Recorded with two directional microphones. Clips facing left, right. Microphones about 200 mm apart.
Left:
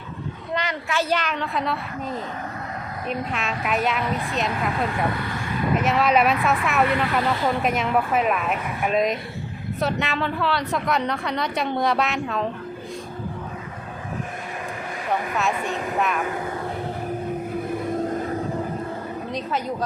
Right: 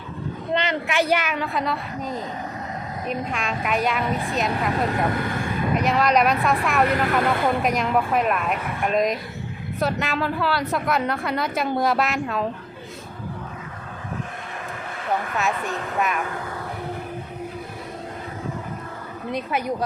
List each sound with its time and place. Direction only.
0.5 s a woman's voice: 25° right (ahead or behind); by 4.7 s centre (ahead or behind)
5.7 s a woman's voice: centre (ahead or behind)
6.8 s speech: 45° right (ahead or behind)
7.4 s a woman's voice: centre (ahead or behind)
15.5 s a woman's voice: 15° left (ahead or behind)
16.0 s a woman's voice: centre (ahead or behind)
19.5 s a woman's voice: 10° right (ahead or behind)